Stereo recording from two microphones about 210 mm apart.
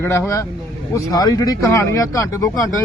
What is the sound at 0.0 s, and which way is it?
Speech, 10° left (ahead or behind).